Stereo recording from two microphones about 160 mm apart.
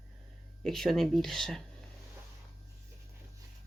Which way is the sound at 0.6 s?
Centre (ahead or behind).